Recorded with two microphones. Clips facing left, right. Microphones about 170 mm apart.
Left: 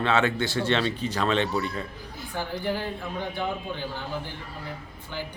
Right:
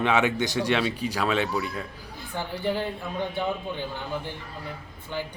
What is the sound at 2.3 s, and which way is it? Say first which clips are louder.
Speech: right 1 dB; 20° right (ahead or behind).